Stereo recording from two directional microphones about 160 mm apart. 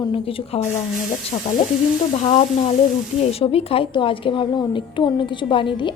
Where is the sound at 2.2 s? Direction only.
40° left (ahead or behind).